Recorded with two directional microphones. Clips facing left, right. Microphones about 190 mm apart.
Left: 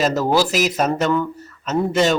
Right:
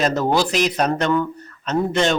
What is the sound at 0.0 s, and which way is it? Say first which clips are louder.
A man's voice: left 1 dB; centre (ahead or behind).